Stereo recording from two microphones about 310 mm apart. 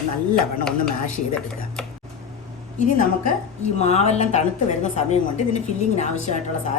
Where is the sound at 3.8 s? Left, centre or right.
Left.